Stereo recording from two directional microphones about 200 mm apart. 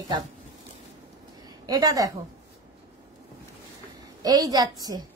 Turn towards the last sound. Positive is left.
turn(degrees=-20)  # may be behind; listen again after turning